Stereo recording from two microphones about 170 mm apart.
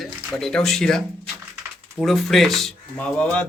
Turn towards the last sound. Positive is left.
turn(degrees=5)  # may be behind; listen again after turning